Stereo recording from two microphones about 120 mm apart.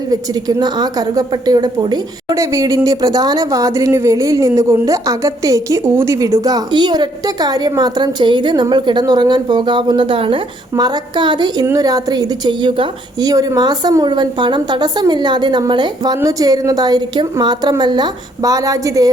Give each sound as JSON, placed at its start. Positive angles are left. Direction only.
{"t": 0.1, "sound": "a woman's voice", "side_deg": -35}
{"t": 13.3, "sound": "a woman's voice", "side_deg": -30}